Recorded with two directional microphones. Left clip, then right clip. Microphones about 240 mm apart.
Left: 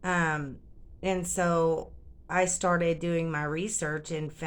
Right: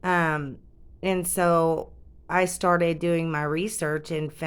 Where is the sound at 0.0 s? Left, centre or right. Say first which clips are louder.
Right 5 dB; right.